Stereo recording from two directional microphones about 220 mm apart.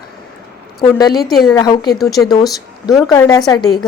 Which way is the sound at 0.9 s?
15° left (ahead or behind).